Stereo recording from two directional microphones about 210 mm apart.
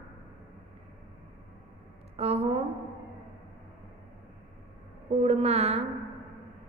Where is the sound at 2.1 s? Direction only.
30° right (ahead or behind).